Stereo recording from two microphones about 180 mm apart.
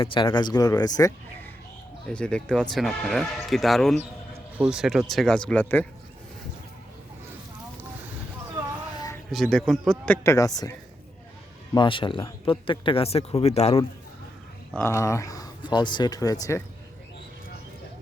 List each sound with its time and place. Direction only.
0.0 s speech: 30° left (ahead or behind)
2.0 s speech: 5° left (ahead or behind)
9.3 s speech: centre (ahead or behind)
10.2 s speech: 20° left (ahead or behind); by 13.8 s 35° left (ahead or behind)
14.8 s speech: 15° left (ahead or behind)